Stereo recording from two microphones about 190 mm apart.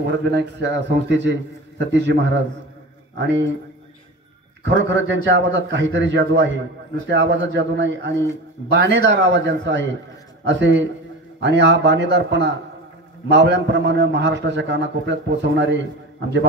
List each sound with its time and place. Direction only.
0.2 s a man's voice: 65° right (ahead or behind)
4.6 s a man's voice: 70° right (ahead or behind)